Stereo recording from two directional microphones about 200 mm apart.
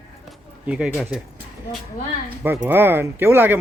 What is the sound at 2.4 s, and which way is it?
A man's voice, 10° right (ahead or behind).